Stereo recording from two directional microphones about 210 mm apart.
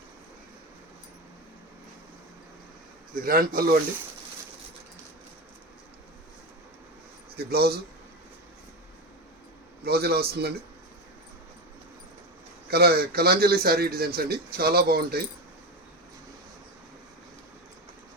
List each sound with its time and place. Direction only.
3.2 s a man's voice: 45° right (ahead or behind)
7.3 s a man's voice: 50° right (ahead or behind)
9.8 s a man's voice: 50° right (ahead or behind)
12.7 s a man's voice: 50° right (ahead or behind)